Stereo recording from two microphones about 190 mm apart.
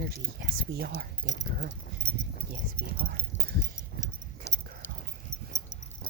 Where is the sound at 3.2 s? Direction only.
25° left (ahead or behind).